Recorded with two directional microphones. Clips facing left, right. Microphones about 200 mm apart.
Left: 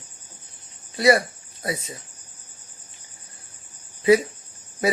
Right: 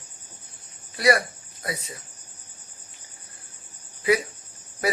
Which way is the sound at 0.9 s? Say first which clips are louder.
Left 3 dB; 25° left (ahead or behind).